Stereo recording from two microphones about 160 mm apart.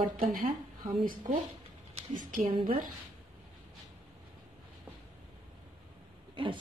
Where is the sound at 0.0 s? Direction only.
60° right (ahead or behind).